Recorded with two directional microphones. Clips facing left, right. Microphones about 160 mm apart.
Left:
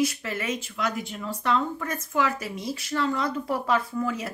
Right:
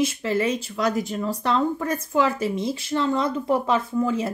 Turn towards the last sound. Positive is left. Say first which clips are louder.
# right 6 dB
turn(degrees=-25)  # may be behind; listen again after turning